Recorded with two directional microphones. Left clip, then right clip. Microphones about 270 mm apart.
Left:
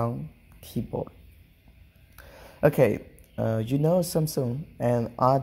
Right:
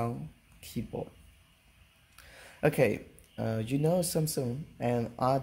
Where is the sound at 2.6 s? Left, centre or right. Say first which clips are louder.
Left 6 dB; centre.